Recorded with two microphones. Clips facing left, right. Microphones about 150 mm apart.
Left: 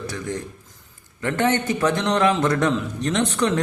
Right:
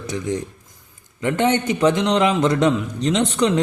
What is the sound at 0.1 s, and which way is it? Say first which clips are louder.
A man's voice: right 4 dB; 20° right (ahead or behind).